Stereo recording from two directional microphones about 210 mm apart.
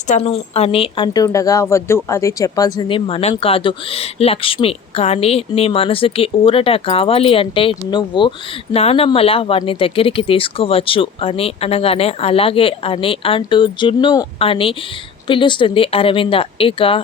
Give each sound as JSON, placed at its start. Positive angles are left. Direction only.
{"t": 0.1, "sound": "speech", "side_deg": 30}